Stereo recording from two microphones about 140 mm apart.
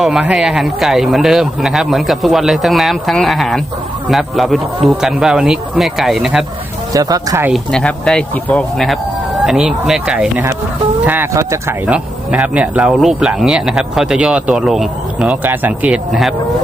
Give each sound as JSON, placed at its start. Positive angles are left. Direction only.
{"t": 0.0, "sound": "speech", "side_deg": -5}
{"t": 6.9, "sound": "speech", "side_deg": -25}
{"t": 7.5, "sound": "speech", "side_deg": 5}